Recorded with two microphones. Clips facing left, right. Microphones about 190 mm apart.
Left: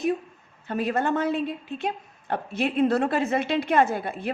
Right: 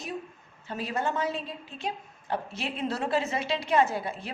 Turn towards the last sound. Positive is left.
turn(degrees=55)  # may be behind; listen again after turning